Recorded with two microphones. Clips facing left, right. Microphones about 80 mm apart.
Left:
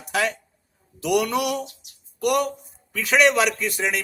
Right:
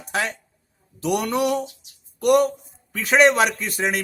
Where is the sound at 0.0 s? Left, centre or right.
Right.